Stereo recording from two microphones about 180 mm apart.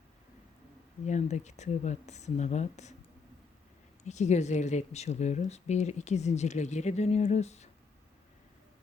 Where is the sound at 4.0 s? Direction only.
40° left (ahead or behind).